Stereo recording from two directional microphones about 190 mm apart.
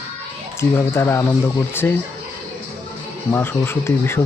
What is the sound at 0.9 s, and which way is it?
Speech, 15° left (ahead or behind).